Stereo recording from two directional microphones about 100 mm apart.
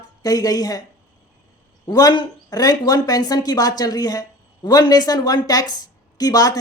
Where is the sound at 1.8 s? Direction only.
40° left (ahead or behind).